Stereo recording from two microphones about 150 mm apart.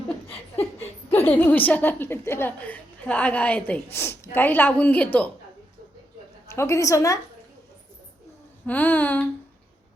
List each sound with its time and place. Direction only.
0.8 s a woman's voice: 15° left (ahead or behind)
6.5 s a woman's voice: 20° left (ahead or behind)
8.6 s a woman's voice: 10° left (ahead or behind)